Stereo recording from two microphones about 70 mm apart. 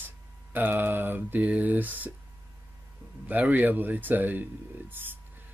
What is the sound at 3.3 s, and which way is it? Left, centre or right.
Speech, right.